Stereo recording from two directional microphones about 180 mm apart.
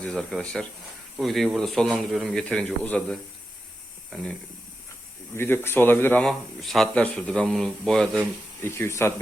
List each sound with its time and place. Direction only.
0.0 s speech: 5° left (ahead or behind)
5.3 s speech: 15° left (ahead or behind)
8.6 s speech: 15° left (ahead or behind)